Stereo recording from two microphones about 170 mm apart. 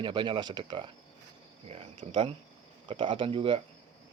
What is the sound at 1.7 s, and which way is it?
Cricket, 40° right (ahead or behind).